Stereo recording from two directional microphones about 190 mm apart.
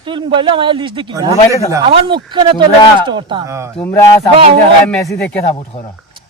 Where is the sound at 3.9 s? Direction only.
15° left (ahead or behind).